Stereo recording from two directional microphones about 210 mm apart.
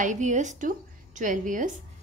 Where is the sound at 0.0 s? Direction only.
35° right (ahead or behind).